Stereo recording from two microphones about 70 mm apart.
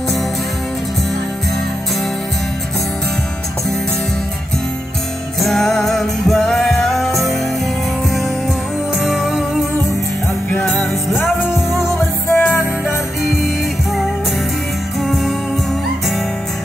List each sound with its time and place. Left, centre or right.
5.4 s music: centre
9.0 s music: centre
10.7 s music: centre
12.0 s music: left
15.0 s music: centre